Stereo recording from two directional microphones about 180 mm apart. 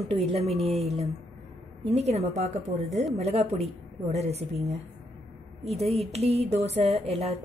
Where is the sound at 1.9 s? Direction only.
35° right (ahead or behind).